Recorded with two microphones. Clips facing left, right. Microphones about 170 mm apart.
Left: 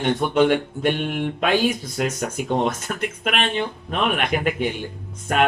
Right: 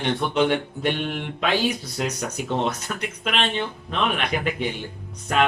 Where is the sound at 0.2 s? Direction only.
50° left (ahead or behind).